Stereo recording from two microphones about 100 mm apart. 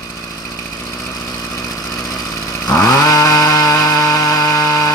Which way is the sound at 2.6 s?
35° left (ahead or behind).